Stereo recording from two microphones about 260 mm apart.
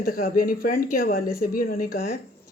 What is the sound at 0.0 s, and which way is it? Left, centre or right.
A woman's voice, left.